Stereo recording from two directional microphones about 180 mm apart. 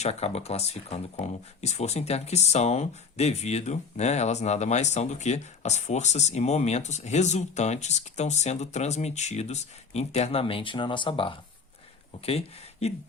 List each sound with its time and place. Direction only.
0.0 s speech: 35° left (ahead or behind)